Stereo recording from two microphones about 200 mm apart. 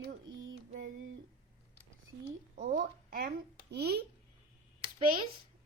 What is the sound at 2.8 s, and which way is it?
A child's voice, 45° right (ahead or behind).